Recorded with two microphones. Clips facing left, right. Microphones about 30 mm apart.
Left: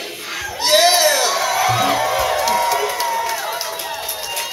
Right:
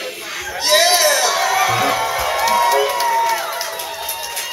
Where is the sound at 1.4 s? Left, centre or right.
Centre.